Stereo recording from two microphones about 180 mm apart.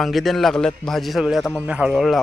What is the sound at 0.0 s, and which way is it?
A man's voice, centre (ahead or behind).